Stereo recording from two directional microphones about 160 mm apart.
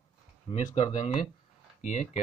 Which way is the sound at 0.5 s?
35° left (ahead or behind).